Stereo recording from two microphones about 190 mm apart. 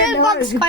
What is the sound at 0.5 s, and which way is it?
Speech, 15° right (ahead or behind).